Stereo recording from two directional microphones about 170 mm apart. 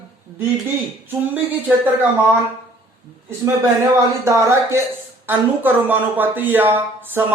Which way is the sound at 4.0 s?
15° right (ahead or behind).